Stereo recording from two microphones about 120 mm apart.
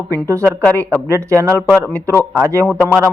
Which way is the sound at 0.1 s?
25° right (ahead or behind).